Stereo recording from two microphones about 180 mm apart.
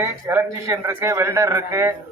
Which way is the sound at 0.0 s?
15° right (ahead or behind).